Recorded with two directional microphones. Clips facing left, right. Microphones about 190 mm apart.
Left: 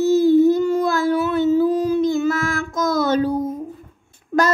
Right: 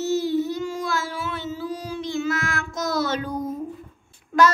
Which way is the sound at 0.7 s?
45° left (ahead or behind).